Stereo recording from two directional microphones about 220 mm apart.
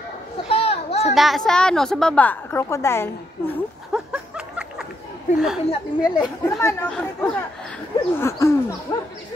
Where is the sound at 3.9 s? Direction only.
5° right (ahead or behind).